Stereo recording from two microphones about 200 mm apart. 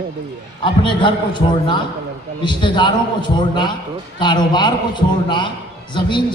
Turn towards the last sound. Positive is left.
turn(degrees=25)  # may be behind; listen again after turning